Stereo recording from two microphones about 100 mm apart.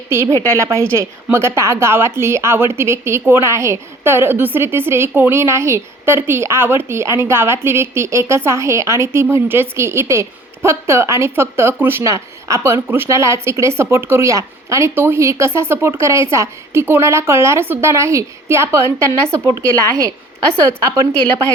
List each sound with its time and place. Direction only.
0.1 s a woman's voice: 25° right (ahead or behind)